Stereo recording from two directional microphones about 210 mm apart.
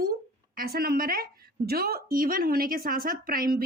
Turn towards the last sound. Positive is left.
turn(degrees=-45)  # may be behind; listen again after turning